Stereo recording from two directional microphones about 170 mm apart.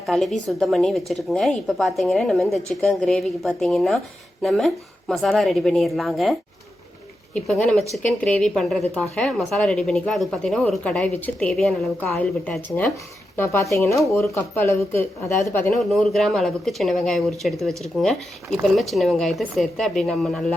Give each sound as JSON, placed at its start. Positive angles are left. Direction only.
{"t": 0.0, "sound": "speech", "side_deg": 0}
{"t": 7.3, "sound": "speech", "side_deg": 5}
{"t": 15.9, "sound": "speech", "side_deg": 0}